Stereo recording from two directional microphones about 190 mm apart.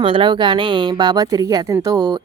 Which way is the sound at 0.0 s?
25° right (ahead or behind).